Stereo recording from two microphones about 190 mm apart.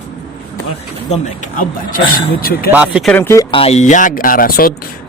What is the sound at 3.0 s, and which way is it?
Speech, 10° left (ahead or behind).